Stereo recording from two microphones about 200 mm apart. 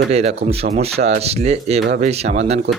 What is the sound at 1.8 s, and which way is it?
Speech, 50° right (ahead or behind).